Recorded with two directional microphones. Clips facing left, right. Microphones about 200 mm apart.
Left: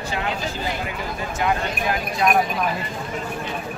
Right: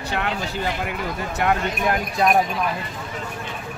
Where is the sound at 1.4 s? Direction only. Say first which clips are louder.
Right 2 dB; 55° right (ahead or behind).